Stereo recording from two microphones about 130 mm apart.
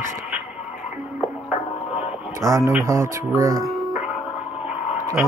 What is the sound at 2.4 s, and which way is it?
Speech, 20° right (ahead or behind).